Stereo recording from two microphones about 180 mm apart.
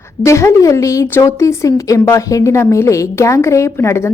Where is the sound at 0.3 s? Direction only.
15° left (ahead or behind).